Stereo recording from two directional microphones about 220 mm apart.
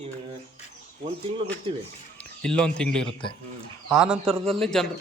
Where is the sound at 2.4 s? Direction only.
5° left (ahead or behind).